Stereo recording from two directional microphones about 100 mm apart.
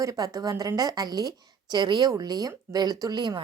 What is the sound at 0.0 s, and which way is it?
A woman's voice, 35° right (ahead or behind).